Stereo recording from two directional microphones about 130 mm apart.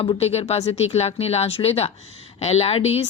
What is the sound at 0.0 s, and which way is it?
Speech, 50° left (ahead or behind).